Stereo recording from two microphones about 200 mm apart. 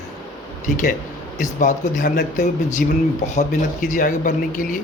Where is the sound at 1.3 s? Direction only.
40° left (ahead or behind).